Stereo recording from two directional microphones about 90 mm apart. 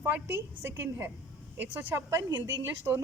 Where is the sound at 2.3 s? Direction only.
50° right (ahead or behind).